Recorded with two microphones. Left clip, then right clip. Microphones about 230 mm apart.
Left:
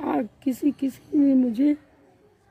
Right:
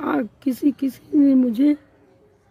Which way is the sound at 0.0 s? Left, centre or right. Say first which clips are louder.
Right 3 dB; centre.